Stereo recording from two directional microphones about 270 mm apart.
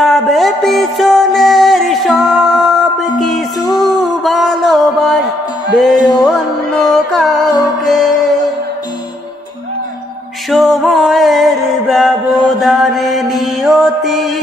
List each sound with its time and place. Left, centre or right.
0.0 s music: centre
4.2 s a sound: centre
5.9 s music: centre
6.2 s music: centre
10.5 s mantra: centre